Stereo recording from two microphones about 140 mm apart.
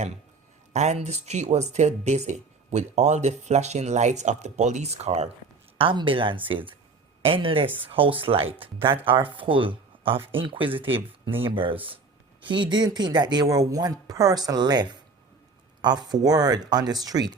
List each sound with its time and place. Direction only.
0.7 s speech: 55° right (ahead or behind)
5.7 s speech: 40° right (ahead or behind)